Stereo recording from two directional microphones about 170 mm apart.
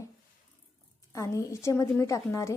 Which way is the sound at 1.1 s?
15° left (ahead or behind).